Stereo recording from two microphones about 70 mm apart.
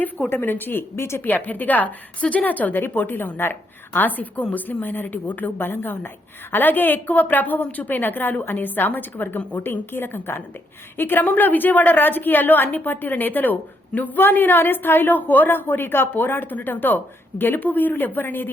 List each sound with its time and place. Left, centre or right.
0.3 s a woman's voice: left
1.3 s a woman's voice: left